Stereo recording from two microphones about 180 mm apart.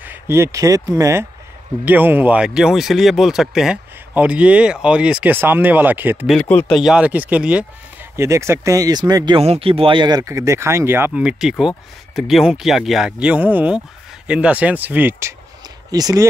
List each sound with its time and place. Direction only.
0.0 s speech: 10° right (ahead or behind)
6.3 s speech: 5° left (ahead or behind)
6.8 s speech: 5° right (ahead or behind)